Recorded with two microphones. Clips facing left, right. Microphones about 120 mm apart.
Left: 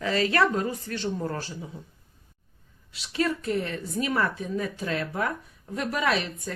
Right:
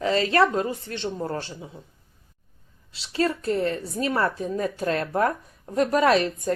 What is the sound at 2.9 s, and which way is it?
Speech, 30° right (ahead or behind).